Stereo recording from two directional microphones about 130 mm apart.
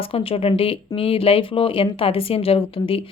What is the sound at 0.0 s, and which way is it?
A woman's voice, 45° left (ahead or behind).